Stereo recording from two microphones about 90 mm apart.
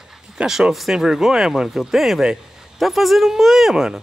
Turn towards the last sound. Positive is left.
turn(degrees=-5)  # may be behind; listen again after turning